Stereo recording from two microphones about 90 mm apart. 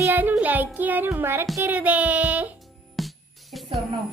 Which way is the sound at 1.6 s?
20° right (ahead or behind).